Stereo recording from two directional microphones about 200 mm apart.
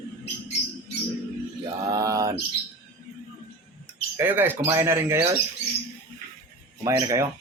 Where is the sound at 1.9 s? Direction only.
15° right (ahead or behind).